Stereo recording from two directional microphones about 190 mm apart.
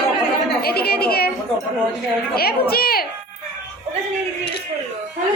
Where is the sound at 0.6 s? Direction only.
55° left (ahead or behind).